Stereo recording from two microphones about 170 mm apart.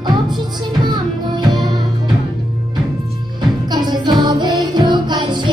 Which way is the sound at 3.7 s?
25° right (ahead or behind).